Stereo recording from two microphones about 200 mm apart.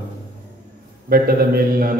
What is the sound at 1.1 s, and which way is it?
Speech, 45° right (ahead or behind).